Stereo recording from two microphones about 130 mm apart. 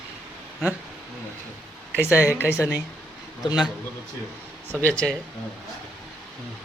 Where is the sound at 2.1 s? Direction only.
10° right (ahead or behind).